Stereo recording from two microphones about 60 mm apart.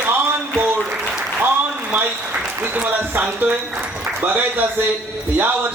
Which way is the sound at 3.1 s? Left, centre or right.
Right.